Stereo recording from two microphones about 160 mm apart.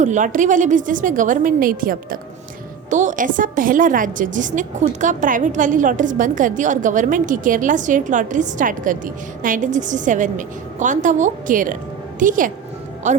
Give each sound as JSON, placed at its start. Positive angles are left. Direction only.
{"t": 0.0, "sound": "a woman's voice", "side_deg": -50}
{"t": 2.9, "sound": "a woman's voice", "side_deg": -50}